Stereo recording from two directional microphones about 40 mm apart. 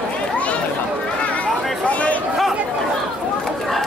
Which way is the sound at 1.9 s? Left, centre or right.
Left.